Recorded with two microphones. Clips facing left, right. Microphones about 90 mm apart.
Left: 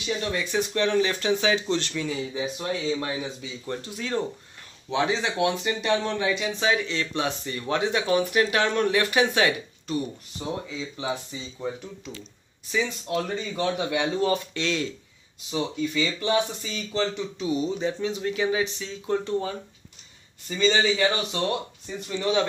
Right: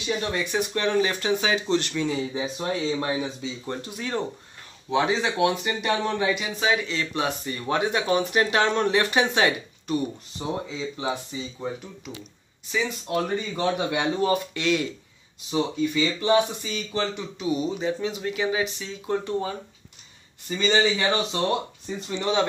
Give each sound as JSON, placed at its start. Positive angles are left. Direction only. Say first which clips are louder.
{"t": 0.1, "sound": "a man's voice", "louder": "right 1 dB", "side_deg": -20}
{"t": 3.8, "sound": "a man's voice", "louder": "left 1 dB", "side_deg": -20}
{"t": 7.2, "sound": "a man's voice", "louder": "right 1 dB", "side_deg": -15}
{"t": 17.7, "sound": "a man's voice", "louder": "even", "side_deg": -5}